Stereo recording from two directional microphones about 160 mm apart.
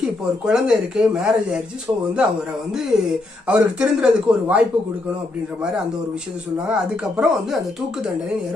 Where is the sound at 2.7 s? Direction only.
5° right (ahead or behind).